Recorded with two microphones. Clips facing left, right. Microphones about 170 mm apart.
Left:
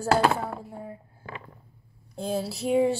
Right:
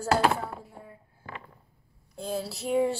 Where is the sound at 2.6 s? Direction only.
10° left (ahead or behind).